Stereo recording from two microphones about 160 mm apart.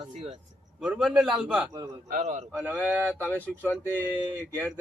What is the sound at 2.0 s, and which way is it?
Speech, 55° right (ahead or behind).